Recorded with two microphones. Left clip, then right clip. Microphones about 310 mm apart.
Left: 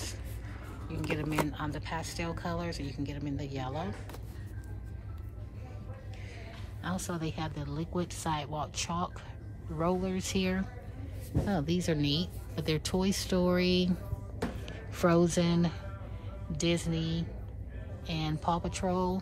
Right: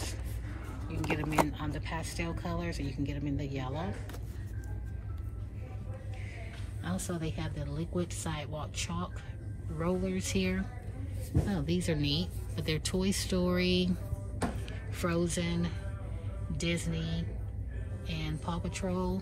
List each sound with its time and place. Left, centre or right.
0.8 s a woman's voice: centre
6.8 s speech: centre
14.4 s a sound: centre
16.5 s speech: centre